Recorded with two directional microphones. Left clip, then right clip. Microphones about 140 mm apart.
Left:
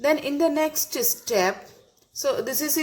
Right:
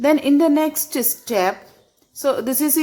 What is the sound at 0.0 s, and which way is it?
A woman's voice, 50° right (ahead or behind).